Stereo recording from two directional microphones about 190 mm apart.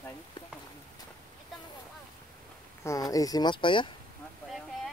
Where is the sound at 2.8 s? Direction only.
15° left (ahead or behind).